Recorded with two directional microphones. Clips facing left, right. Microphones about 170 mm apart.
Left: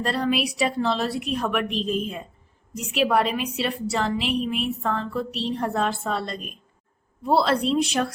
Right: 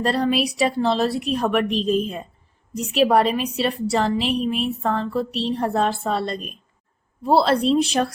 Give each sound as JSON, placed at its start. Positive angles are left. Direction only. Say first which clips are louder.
{"t": 0.0, "sound": "a woman's voice", "louder": "right 3 dB", "side_deg": -35}